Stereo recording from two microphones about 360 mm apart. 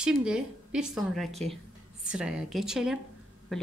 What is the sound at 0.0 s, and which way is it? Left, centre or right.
Speech, centre.